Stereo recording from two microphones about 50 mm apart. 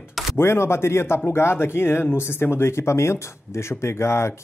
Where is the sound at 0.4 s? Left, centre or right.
Left.